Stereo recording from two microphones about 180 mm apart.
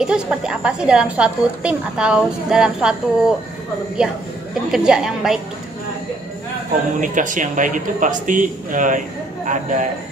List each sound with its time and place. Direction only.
0.0 s a woman's voice: 5° right (ahead or behind)
7.0 s a man's voice: 45° right (ahead or behind)